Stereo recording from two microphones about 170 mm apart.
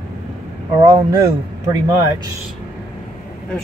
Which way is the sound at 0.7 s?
30° right (ahead or behind).